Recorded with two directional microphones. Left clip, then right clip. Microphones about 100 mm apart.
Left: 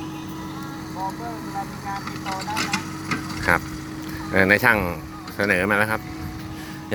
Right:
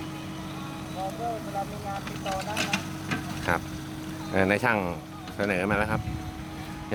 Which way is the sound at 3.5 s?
10° left (ahead or behind).